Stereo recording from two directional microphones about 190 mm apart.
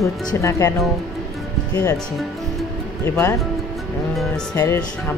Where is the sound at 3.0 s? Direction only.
10° left (ahead or behind).